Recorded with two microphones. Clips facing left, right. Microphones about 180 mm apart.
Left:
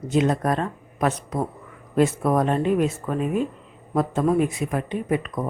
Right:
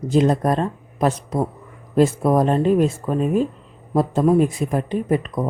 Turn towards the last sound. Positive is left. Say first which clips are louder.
# right 4 dB
turn(degrees=-35)  # may be behind; listen again after turning